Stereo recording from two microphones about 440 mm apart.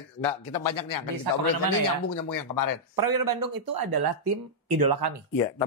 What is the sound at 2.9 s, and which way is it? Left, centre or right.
Speech, right.